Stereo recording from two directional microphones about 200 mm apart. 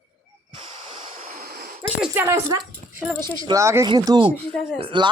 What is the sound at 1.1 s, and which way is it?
Vehicle, 40° right (ahead or behind).